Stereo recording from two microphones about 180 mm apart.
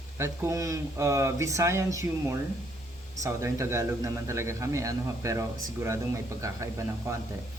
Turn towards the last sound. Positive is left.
turn(degrees=-15)  # may be behind; listen again after turning